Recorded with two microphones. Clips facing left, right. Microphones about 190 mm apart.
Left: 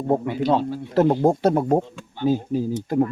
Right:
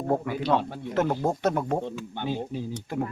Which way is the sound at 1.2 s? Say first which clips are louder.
Left 7 dB; 35° left (ahead or behind).